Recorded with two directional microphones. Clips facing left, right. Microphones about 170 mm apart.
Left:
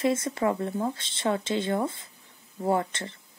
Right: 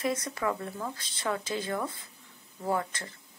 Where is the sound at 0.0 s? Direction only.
25° left (ahead or behind).